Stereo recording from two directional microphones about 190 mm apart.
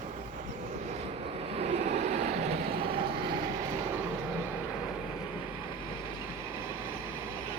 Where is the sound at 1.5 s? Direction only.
35° right (ahead or behind).